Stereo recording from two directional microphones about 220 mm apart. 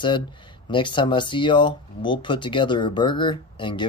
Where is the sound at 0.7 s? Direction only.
20° left (ahead or behind).